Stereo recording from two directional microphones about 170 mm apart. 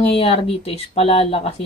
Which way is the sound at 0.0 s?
35° left (ahead or behind).